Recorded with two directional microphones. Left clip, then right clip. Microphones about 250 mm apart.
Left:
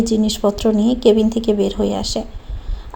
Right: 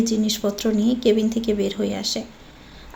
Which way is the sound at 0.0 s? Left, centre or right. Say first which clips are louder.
Left 5 dB; centre.